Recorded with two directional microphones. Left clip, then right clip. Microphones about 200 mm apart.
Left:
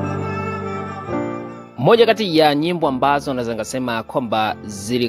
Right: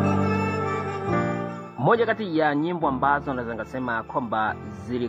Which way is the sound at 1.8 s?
40° left (ahead or behind).